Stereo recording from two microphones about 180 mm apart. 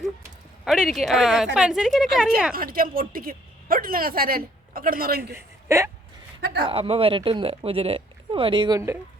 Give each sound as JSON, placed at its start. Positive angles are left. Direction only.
{"t": 0.6, "sound": "a woman's voice", "side_deg": 0}
{"t": 2.5, "sound": "a woman's voice", "side_deg": -55}
{"t": 5.3, "sound": "a man's voice", "side_deg": -15}
{"t": 6.4, "sound": "speech", "side_deg": -65}
{"t": 6.7, "sound": "speech", "side_deg": -30}